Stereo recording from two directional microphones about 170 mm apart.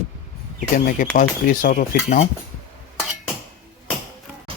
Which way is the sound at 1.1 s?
55° left (ahead or behind).